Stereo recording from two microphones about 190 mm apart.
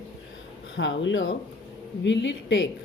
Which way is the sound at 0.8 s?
80° left.